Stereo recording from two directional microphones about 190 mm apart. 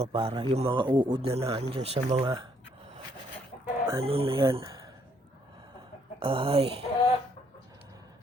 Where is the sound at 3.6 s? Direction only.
15° right (ahead or behind).